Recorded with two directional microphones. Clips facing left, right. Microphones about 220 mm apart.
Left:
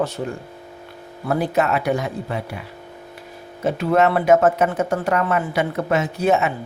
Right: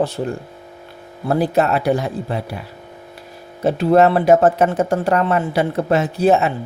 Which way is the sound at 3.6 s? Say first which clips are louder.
Right 4 dB; 35° right (ahead or behind).